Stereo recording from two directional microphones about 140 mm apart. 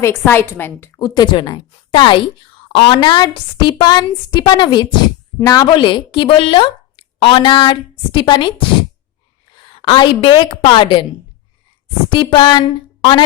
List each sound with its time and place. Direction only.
0.0 s a woman's voice: 15° left (ahead or behind)
0.9 s a woman's voice: 30° left (ahead or behind)
9.7 s a woman's voice: 35° left (ahead or behind)
12.0 s a woman's voice: 35° left (ahead or behind)